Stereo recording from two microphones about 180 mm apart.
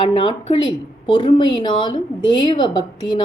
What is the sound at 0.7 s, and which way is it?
A woman's voice, 25° left (ahead or behind).